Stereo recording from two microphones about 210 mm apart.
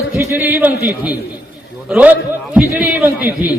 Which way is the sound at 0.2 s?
10° right (ahead or behind).